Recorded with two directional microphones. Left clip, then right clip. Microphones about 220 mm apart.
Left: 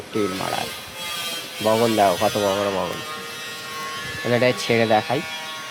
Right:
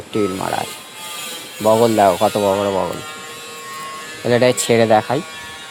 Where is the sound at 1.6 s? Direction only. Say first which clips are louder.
Right 5 dB; 40° right (ahead or behind).